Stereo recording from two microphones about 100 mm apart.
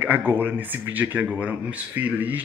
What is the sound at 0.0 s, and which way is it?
Speech, 20° right (ahead or behind).